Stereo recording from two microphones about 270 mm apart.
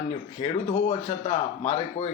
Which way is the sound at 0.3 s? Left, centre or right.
Left.